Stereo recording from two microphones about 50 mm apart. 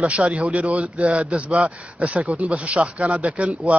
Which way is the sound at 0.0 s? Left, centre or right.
Right.